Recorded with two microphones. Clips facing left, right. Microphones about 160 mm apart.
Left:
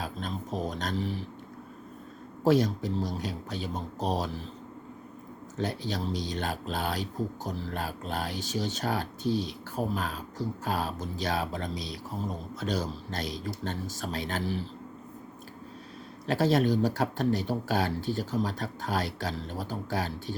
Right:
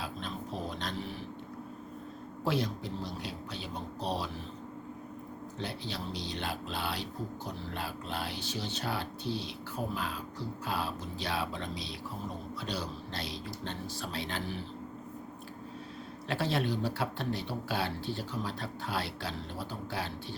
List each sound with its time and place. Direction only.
0.0 s a sound: 45° left (ahead or behind)
2.4 s speech: 45° left (ahead or behind)
5.5 s speech: 45° left (ahead or behind)
16.2 s speech: 40° left (ahead or behind)